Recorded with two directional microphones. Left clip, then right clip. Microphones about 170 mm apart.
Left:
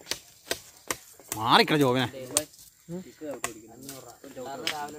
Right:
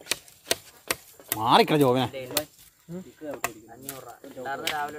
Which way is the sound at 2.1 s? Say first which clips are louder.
Right 2 dB; 15° left (ahead or behind).